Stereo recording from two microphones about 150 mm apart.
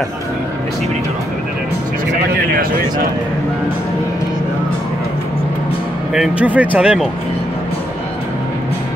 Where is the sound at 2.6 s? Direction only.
75° right (ahead or behind).